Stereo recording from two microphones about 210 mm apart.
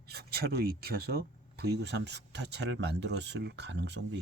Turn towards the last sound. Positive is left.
turn(degrees=-55)  # may be behind; listen again after turning